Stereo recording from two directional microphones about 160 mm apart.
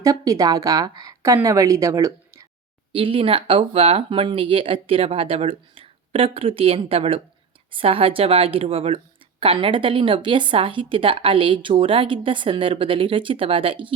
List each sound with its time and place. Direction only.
0.0 s a woman's voice: 20° right (ahead or behind)
2.9 s speech: 35° right (ahead or behind)